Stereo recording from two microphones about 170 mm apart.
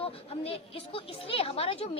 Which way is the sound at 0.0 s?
35° left (ahead or behind).